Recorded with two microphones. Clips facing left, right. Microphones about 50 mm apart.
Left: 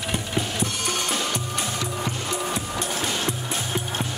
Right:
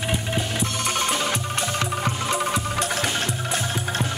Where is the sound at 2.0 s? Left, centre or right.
Right.